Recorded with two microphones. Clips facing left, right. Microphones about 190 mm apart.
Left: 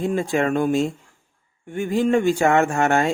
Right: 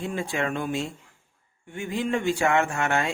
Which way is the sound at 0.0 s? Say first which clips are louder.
Left 7 dB; 45° left (ahead or behind).